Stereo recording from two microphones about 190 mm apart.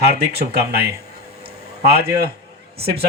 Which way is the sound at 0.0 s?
55° right (ahead or behind).